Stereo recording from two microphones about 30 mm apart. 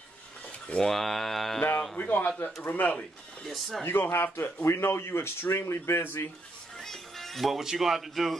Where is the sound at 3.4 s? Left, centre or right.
Centre.